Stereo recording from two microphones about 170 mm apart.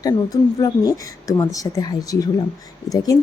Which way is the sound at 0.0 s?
20° left (ahead or behind).